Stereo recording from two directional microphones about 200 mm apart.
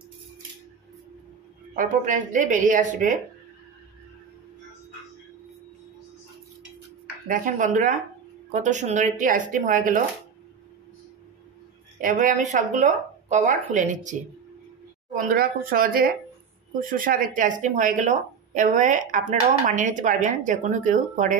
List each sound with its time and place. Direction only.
1.8 s a woman's voice: 40° right (ahead or behind)
7.2 s a woman's voice: 45° right (ahead or behind)
12.0 s a woman's voice: 40° right (ahead or behind)
15.1 s a woman's voice: 45° right (ahead or behind)